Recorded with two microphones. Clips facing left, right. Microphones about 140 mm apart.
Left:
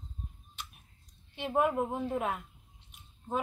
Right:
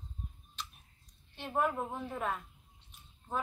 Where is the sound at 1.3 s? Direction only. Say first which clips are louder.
Left 4 dB; 15° left (ahead or behind).